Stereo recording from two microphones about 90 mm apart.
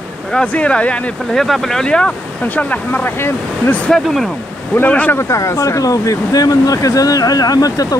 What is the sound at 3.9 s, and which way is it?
Speech, centre (ahead or behind).